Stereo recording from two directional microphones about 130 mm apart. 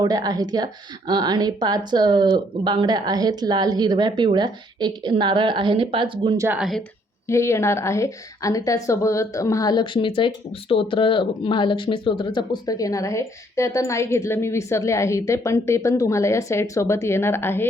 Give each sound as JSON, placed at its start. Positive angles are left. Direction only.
{"t": 0.0, "sound": "speech", "side_deg": -30}
{"t": 6.5, "sound": "a woman's voice", "side_deg": 0}
{"t": 7.3, "sound": "speech", "side_deg": 20}